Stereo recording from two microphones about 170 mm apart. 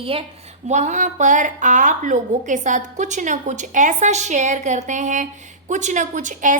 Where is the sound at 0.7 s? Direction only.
45° right (ahead or behind).